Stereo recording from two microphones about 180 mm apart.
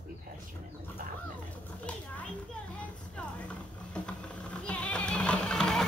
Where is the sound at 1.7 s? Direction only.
5° left (ahead or behind).